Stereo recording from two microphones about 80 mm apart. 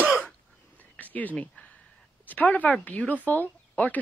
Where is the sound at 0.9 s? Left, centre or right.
Left.